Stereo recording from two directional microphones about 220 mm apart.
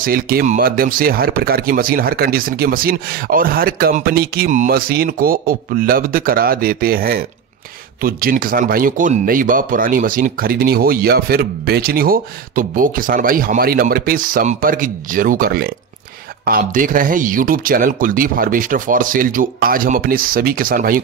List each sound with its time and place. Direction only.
0.0 s speech: 40° right (ahead or behind)